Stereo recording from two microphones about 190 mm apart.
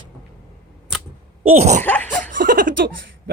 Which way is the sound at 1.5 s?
35° right (ahead or behind).